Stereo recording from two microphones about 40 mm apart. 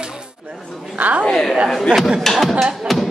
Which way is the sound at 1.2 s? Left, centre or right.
Centre.